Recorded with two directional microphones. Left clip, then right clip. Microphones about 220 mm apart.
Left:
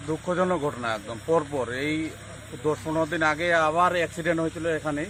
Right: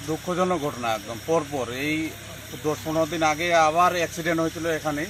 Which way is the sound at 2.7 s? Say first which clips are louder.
Right 1 dB; 15° left (ahead or behind).